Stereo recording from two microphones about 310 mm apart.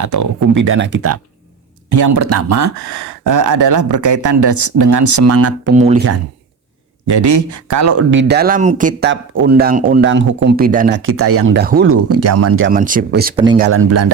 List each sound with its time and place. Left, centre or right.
0.0 s speech: right
0.5 s speech: right
1.9 s speech: right
7.2 s speech: right
8.1 s speech: right
11.5 s speech: right
11.9 s speech: right
12.7 s speech: right
13.3 s speech: centre
13.7 s speech: right